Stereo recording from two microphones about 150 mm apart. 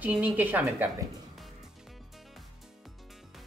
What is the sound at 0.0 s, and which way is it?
Speech, 10° right (ahead or behind).